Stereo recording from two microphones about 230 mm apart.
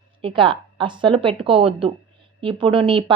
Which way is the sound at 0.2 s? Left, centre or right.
Right.